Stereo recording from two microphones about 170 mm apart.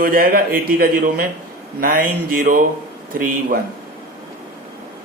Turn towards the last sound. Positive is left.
turn(degrees=-55)  # may be behind; listen again after turning